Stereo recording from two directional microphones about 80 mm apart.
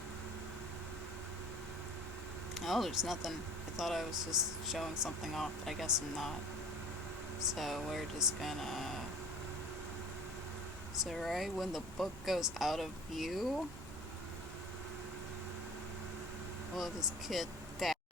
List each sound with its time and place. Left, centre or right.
2.6 s speech: centre
7.3 s speech: centre
11.0 s speech: centre
16.7 s speech: centre